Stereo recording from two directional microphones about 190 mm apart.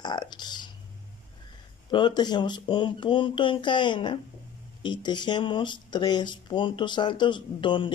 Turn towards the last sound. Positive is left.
turn(degrees=25)  # may be behind; listen again after turning